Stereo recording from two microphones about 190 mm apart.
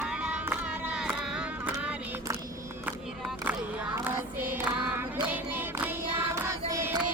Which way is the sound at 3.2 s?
10° right (ahead or behind).